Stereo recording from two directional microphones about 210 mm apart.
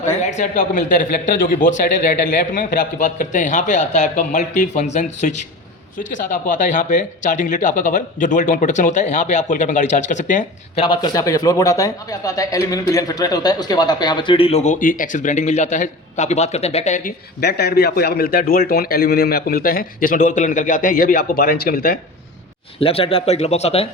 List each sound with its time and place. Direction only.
0.2 s speech: 35° left (ahead or behind)
6.4 s speech: 35° left (ahead or behind)
10.8 s speech: 20° left (ahead or behind); by 21.9 s 45° left (ahead or behind)
22.8 s speech: 25° left (ahead or behind)